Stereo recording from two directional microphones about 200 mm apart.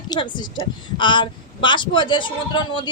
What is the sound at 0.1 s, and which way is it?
A woman's voice, 20° left (ahead or behind).